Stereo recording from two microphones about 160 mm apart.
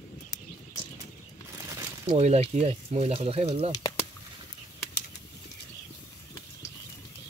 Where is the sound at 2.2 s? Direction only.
40° right (ahead or behind).